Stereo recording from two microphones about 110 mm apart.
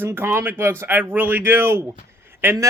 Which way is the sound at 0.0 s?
20° right (ahead or behind).